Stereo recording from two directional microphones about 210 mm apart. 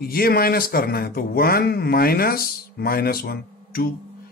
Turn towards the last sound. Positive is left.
turn(degrees=45)  # may be behind; listen again after turning